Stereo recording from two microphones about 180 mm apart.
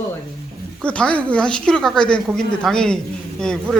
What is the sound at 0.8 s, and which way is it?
Speech, 5° left (ahead or behind).